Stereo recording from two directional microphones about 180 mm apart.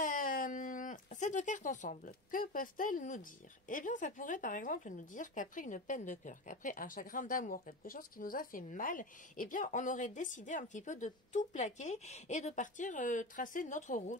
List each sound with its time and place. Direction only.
0.0 s speech: 50° left (ahead or behind)